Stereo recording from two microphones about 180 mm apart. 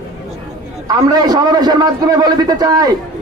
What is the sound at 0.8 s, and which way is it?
A man's voice, 20° right (ahead or behind).